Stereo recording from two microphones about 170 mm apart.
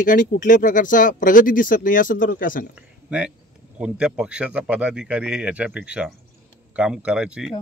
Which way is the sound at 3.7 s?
5° right (ahead or behind).